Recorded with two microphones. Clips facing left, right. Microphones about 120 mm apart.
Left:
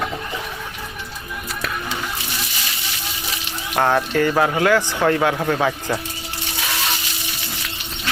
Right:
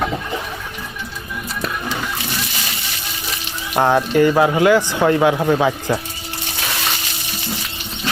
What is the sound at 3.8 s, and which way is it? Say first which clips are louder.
Speech: right 4 dB; 15° right (ahead or behind).